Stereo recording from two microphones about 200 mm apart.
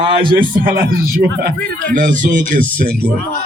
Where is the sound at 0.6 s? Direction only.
45° right (ahead or behind).